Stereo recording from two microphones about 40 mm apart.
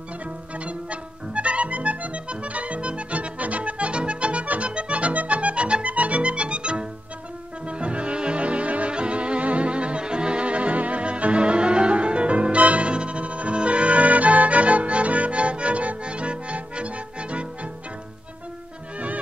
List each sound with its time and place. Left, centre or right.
0.7 s music: right